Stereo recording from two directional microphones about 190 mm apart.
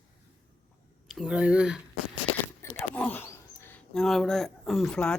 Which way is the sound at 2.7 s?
10° left (ahead or behind).